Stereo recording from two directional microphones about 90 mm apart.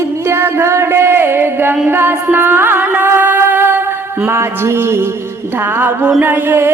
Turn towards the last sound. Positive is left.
turn(degrees=-25)  # may be behind; listen again after turning